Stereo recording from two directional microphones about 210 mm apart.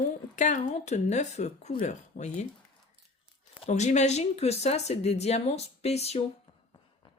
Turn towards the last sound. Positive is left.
turn(degrees=30)  # may be behind; listen again after turning